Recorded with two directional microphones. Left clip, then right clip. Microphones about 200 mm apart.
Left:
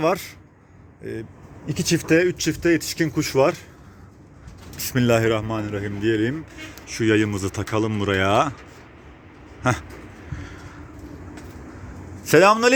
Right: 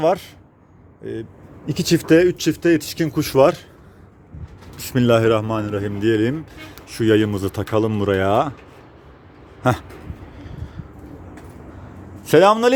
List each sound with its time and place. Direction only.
0.0 s speech: 10° right (ahead or behind)
1.6 s speech: 30° right (ahead or behind)
4.8 s speech: 20° right (ahead or behind)
9.6 s speech: 20° right (ahead or behind)
12.3 s speech: 10° right (ahead or behind)